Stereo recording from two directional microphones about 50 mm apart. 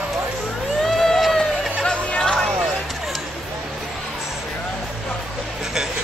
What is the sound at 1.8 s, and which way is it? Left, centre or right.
Music, left.